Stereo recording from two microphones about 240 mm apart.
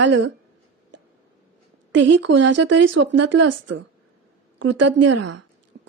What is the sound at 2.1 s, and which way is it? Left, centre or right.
Speech, right.